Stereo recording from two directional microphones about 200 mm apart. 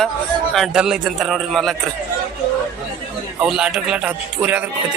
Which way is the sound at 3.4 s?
5° right (ahead or behind).